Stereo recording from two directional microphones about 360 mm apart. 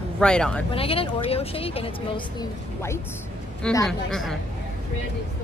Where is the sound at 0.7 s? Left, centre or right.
Centre.